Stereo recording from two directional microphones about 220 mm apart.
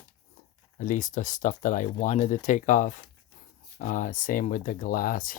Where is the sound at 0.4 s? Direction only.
35° left (ahead or behind).